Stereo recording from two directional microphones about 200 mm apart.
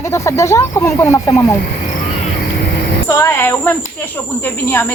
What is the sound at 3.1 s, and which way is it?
Speech, 15° left (ahead or behind).